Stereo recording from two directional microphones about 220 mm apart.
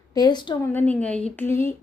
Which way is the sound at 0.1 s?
20° left (ahead or behind).